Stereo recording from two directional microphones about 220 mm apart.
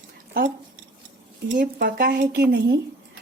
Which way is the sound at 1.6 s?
50° right (ahead or behind).